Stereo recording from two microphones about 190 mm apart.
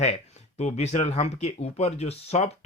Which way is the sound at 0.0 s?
35° left (ahead or behind).